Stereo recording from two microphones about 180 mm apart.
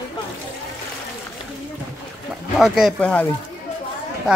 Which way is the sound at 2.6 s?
5° right (ahead or behind).